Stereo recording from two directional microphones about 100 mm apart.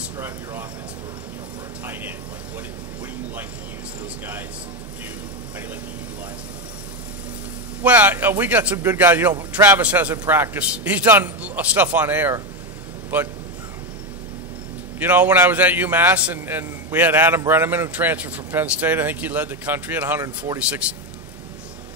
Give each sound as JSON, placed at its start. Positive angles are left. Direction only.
{"t": 0.2, "sound": "a man's voice", "side_deg": -20}
{"t": 7.8, "sound": "a man's voice", "side_deg": -20}
{"t": 15.0, "sound": "a man's voice", "side_deg": -15}